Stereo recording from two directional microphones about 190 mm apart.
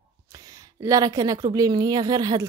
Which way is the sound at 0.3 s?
20° right (ahead or behind).